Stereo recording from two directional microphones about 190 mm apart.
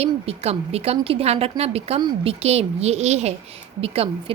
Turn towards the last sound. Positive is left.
turn(degrees=-30)  # may be behind; listen again after turning